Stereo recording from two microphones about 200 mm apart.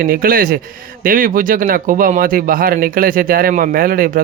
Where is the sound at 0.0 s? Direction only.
45° right (ahead or behind).